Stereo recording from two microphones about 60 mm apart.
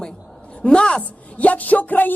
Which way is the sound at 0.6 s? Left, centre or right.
Centre.